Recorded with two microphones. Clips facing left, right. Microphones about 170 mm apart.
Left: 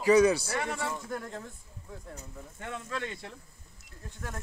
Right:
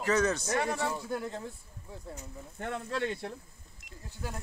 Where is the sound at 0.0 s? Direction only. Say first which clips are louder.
Left 6 dB; 10° left (ahead or behind).